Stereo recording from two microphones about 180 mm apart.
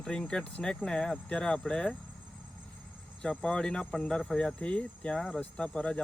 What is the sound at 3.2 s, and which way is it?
Speech, 5° left (ahead or behind).